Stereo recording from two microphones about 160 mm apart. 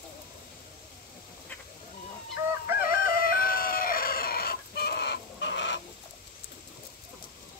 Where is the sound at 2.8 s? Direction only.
65° left (ahead or behind); by 5.8 s 90° left.